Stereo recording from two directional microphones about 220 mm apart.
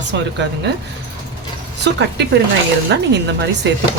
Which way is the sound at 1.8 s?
50° right (ahead or behind).